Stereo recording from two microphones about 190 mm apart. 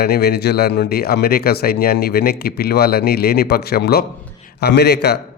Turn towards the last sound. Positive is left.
turn(degrees=60)  # may be behind; listen again after turning